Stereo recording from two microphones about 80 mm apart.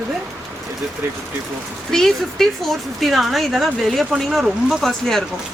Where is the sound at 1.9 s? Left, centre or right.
Centre.